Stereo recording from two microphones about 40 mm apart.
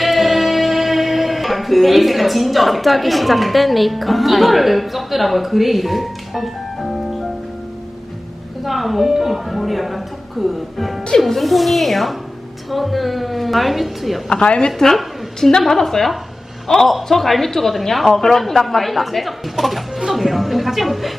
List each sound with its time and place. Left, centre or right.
0.0 s music: centre
8.6 s a woman's voice: centre
14.3 s a woman's voice: left
15.4 s a woman's voice: centre